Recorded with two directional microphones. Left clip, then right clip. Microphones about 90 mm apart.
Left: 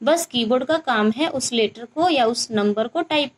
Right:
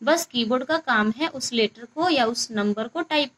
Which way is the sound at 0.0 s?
30° left (ahead or behind).